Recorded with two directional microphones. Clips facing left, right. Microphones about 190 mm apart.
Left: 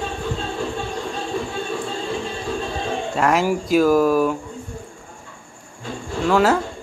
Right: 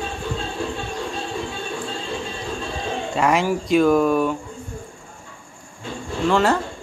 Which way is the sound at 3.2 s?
Centre (ahead or behind).